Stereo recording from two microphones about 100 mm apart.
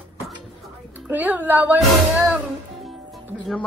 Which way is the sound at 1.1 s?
15° right (ahead or behind).